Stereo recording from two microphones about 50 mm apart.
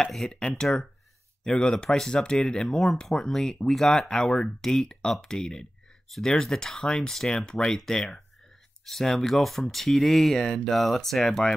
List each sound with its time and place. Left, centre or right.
0.0 s speech: centre